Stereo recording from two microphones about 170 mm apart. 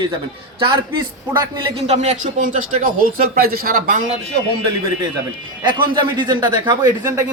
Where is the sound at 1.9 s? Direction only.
40° right (ahead or behind).